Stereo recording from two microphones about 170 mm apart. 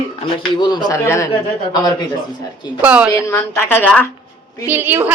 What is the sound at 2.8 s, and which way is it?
Speech, 10° right (ahead or behind).